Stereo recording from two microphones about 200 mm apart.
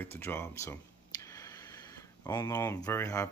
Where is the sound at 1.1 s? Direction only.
20° left (ahead or behind).